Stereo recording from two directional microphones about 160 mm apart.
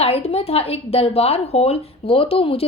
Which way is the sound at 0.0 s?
40° left (ahead or behind).